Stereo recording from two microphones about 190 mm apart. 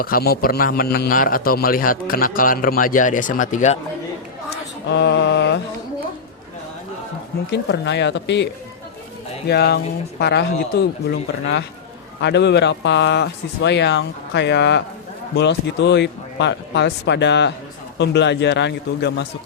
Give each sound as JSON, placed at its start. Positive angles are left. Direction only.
{"t": 0.0, "sound": "a man's voice", "side_deg": 50}
{"t": 4.9, "sound": "mantra", "side_deg": 65}
{"t": 7.5, "sound": "speech", "side_deg": 65}
{"t": 9.5, "sound": "speech", "side_deg": 60}